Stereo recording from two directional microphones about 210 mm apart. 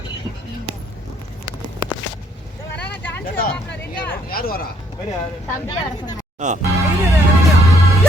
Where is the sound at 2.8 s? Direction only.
50° left (ahead or behind).